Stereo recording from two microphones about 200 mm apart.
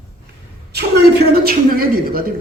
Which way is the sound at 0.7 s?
55° right (ahead or behind).